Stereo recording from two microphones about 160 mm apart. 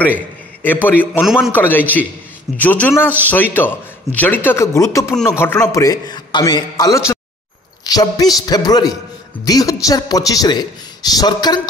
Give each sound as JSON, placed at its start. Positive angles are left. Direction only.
{"t": 0.0, "sound": "a man's voice", "side_deg": 10}
{"t": 1.2, "sound": "a man's voice", "side_deg": 0}
{"t": 1.5, "sound": "a man's voice", "side_deg": 10}